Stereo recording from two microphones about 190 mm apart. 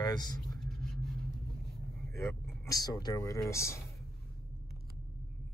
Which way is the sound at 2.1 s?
15° left (ahead or behind).